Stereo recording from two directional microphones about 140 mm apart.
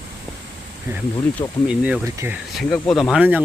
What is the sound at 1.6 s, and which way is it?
Speech, 10° right (ahead or behind).